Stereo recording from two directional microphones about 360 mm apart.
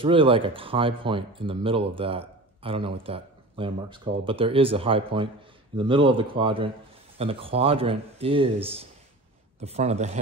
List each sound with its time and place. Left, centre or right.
0.0 s speech: centre